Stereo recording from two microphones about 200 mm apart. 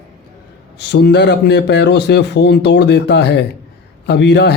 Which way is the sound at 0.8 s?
55° left (ahead or behind).